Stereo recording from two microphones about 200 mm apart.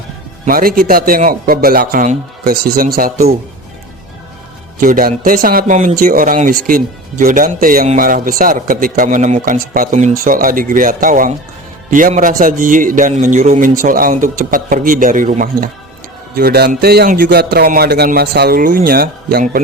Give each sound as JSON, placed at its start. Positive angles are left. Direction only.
{"t": 0.4, "sound": "speech", "side_deg": -45}
{"t": 4.8, "sound": "a man's voice", "side_deg": -45}